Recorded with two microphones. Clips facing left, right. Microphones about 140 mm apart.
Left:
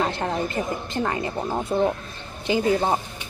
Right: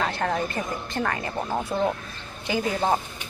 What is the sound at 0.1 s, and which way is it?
A woman's voice, 20° left (ahead or behind).